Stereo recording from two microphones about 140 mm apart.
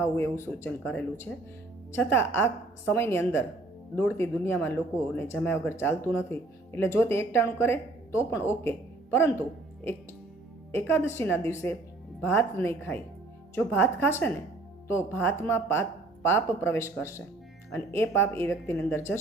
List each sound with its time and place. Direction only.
0.0 s speech: 15° left (ahead or behind)
1.3 s speech: 5° left (ahead or behind)
1.9 s speech: 15° left (ahead or behind)
10.7 s speech: 15° left (ahead or behind)